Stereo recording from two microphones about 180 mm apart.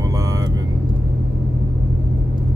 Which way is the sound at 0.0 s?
20° right (ahead or behind).